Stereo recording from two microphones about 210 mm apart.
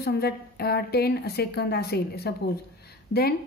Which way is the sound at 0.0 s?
50° left (ahead or behind).